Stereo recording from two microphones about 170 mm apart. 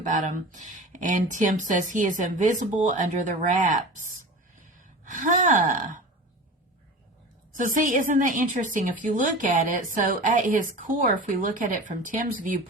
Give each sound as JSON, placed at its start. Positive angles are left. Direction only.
{"t": 0.1, "sound": "a woman's voice", "side_deg": -50}
{"t": 7.5, "sound": "a woman's voice", "side_deg": -50}